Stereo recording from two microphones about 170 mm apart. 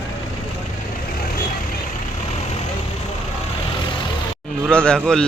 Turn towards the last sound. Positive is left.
turn(degrees=5)  # may be behind; listen again after turning